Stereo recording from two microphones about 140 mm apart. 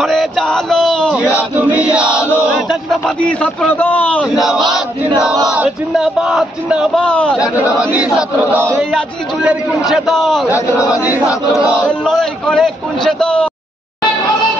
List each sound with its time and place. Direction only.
0.0 s a sound: centre (ahead or behind)
1.1 s chant: 10° right (ahead or behind)
2.7 s a man's voice: 5° left (ahead or behind)
7.0 s a man's voice: 10° left (ahead or behind)
7.3 s chant: 10° right (ahead or behind)
8.7 s a man's voice: 5° right (ahead or behind)
10.5 s chant: 10° right (ahead or behind)
11.2 s battle cry: 25° left (ahead or behind)
11.8 s a man's voice: centre (ahead or behind)